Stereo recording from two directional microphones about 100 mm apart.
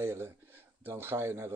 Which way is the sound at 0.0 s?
25° right (ahead or behind).